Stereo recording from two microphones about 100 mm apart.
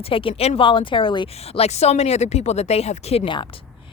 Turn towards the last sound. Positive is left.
turn(degrees=90)